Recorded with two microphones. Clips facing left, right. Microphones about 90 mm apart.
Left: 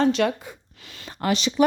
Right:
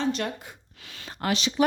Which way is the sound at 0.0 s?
90° left.